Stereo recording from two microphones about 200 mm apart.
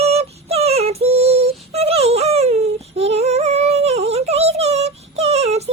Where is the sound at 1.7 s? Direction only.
30° right (ahead or behind).